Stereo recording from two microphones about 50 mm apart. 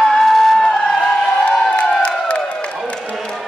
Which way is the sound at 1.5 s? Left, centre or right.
Left.